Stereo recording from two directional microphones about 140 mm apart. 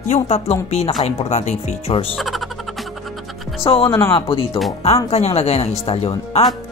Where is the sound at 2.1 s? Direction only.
Centre (ahead or behind).